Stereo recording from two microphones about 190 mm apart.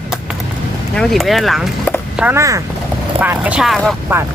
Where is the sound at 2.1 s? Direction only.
10° right (ahead or behind).